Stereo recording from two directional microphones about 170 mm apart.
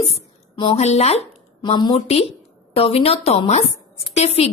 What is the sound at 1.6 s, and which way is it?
A woman's voice, 25° left (ahead or behind).